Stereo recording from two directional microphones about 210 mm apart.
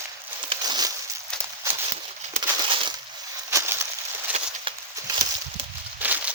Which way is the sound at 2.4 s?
25° right (ahead or behind).